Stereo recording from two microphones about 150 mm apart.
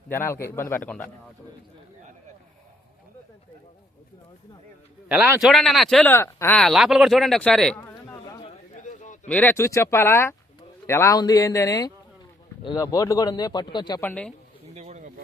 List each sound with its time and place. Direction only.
0.1 s a man's voice: 15° left (ahead or behind)
5.0 s a man's voice: 10° right (ahead or behind)
5.4 s speech: centre (ahead or behind)
6.1 s a man's voice: 15° left (ahead or behind)
6.6 s speech: centre (ahead or behind)
7.8 s a sound: 15° left (ahead or behind)
8.4 s a sound: 50° left (ahead or behind)
9.3 s a man's voice: 10° left (ahead or behind); by 14.0 s 30° left (ahead or behind)
14.0 s a man's voice: 10° left (ahead or behind)
14.8 s a sound: 50° right (ahead or behind)